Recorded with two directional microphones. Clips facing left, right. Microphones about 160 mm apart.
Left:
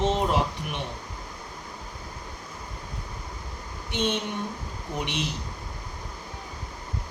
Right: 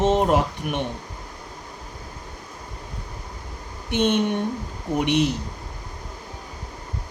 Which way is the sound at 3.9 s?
55° right (ahead or behind).